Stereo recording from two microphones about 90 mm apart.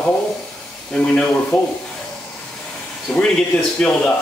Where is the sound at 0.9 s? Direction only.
10° left (ahead or behind).